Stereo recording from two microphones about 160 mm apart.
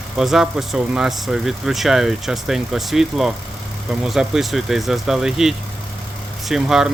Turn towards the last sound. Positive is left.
turn(degrees=-5)  # may be behind; listen again after turning